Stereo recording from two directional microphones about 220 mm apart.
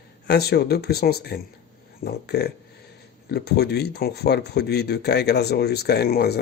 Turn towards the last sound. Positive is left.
turn(degrees=45)  # may be behind; listen again after turning